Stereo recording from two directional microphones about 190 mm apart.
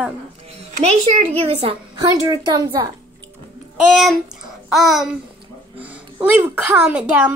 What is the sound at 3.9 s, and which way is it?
A woman's voice, centre (ahead or behind).